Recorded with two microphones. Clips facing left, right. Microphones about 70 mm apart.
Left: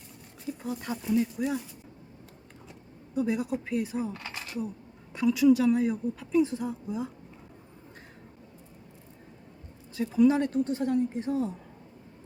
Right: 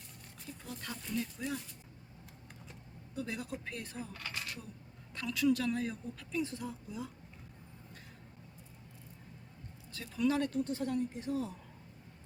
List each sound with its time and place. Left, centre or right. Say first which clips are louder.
0.4 s a woman's voice: left 11 dB; centre
3.2 s a woman's voice: left 12 dB; centre
9.9 s speech: left 10 dB; centre